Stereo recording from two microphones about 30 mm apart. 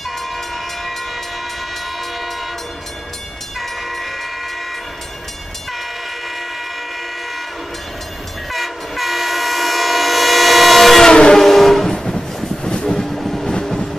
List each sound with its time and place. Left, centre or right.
3.5 s train: centre
8.5 s train: centre
11.1 s train: left
11.3 s train: centre
11.9 s train: left
13.0 s vehicle: centre
13.5 s vehicle: left